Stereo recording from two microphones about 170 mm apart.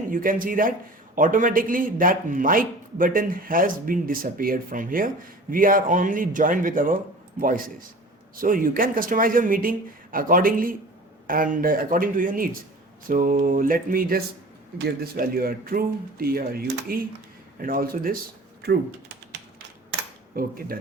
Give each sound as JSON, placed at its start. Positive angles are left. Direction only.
{"t": 0.1, "sound": "speech", "side_deg": -55}
{"t": 14.8, "sound": "speech", "side_deg": -65}
{"t": 18.6, "sound": "typing", "side_deg": -75}